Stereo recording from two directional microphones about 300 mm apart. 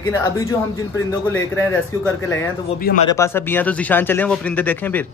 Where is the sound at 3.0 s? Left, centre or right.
Centre.